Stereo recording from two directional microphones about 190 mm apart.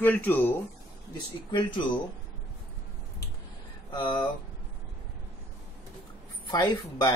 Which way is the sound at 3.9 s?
25° left (ahead or behind).